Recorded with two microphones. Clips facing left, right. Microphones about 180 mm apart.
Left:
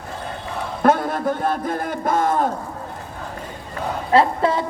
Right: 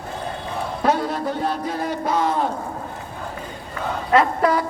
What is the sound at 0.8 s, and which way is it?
A man's voice, 50° left (ahead or behind).